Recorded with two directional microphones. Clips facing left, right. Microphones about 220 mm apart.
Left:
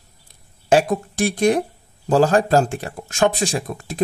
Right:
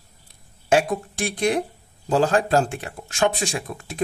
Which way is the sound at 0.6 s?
40° left (ahead or behind).